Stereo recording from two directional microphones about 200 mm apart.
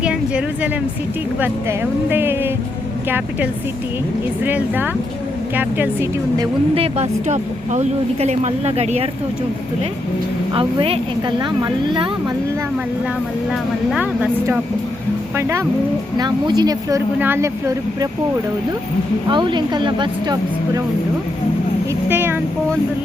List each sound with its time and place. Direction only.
0.0 s a woman's voice: 5° right (ahead or behind)
4.4 s a woman's voice: 10° right (ahead or behind); by 9.0 s 30° right (ahead or behind)
10.5 s speech: 25° right (ahead or behind)
13.5 s speech: 5° right (ahead or behind)
19.3 s speech: 25° right (ahead or behind)
22.1 s speech: 10° right (ahead or behind)